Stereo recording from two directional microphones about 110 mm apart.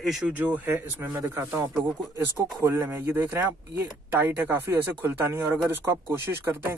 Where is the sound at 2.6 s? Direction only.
20° right (ahead or behind).